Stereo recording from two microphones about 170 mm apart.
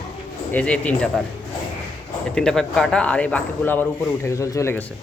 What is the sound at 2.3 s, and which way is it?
A man's voice, 5° left (ahead or behind).